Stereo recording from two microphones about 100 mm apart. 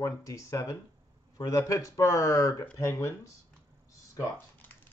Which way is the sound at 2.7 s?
30° left (ahead or behind).